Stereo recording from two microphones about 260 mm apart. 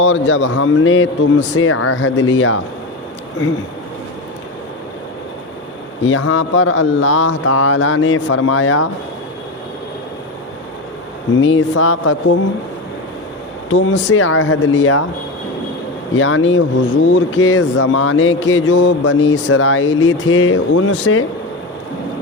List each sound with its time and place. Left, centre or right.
0.0 s speech: left
6.1 s speech: left
11.3 s speech: left
13.7 s speech: left
16.1 s speech: left